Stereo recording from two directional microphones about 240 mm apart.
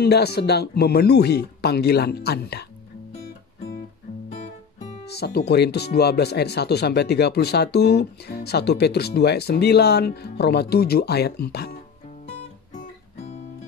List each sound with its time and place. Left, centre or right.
0.0 s speech: left
5.0 s speech: left